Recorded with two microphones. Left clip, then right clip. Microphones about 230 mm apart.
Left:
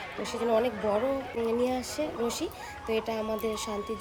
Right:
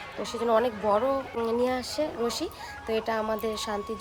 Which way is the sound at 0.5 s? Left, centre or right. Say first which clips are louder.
Right 3 dB; right.